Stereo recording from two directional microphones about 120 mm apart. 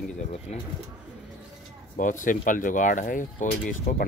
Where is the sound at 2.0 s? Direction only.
90° left.